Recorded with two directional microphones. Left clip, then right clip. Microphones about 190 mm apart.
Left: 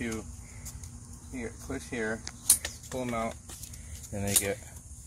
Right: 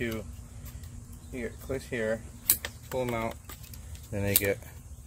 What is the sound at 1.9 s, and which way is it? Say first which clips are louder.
Speech: right 3 dB; 25° right (ahead or behind).